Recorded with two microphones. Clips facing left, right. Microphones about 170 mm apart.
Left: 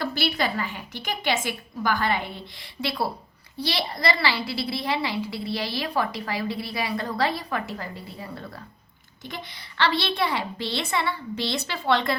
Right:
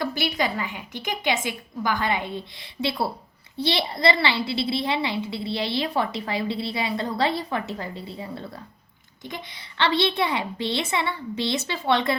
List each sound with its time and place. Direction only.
0.0 s a woman's voice: 15° right (ahead or behind)